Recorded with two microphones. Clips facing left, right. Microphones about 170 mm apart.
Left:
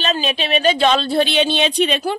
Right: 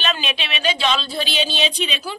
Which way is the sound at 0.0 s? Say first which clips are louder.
Left 5 dB; 40° left (ahead or behind).